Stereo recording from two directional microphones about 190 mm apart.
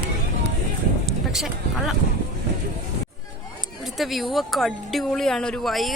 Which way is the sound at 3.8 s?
Centre (ahead or behind).